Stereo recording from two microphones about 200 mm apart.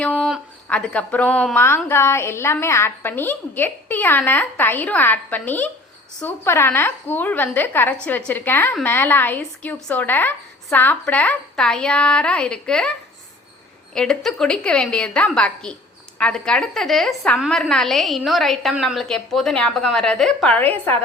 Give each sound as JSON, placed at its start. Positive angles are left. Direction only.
{"t": 0.0, "sound": "a woman's voice", "side_deg": 5}
{"t": 13.9, "sound": "a woman's voice", "side_deg": 5}